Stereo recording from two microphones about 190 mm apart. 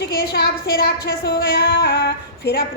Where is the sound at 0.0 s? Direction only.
60° left (ahead or behind).